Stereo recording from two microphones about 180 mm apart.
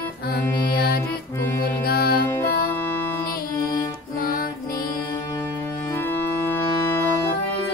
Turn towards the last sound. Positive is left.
turn(degrees=15)  # may be behind; listen again after turning